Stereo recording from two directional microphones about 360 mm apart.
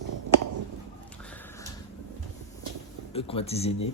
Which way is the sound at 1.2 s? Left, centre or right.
Centre.